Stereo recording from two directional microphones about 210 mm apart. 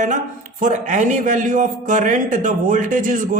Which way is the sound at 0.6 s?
35° right (ahead or behind).